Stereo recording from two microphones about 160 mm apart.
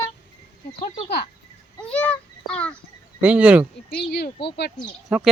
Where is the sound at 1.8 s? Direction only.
10° left (ahead or behind).